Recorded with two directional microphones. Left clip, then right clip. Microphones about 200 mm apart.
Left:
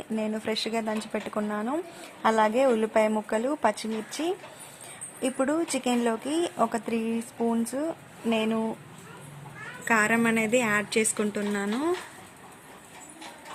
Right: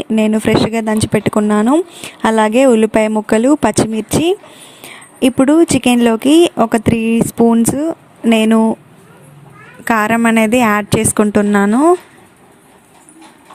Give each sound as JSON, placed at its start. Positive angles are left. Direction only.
{"t": 0.0, "sound": "speech", "side_deg": -45}
{"t": 9.8, "sound": "speech", "side_deg": -45}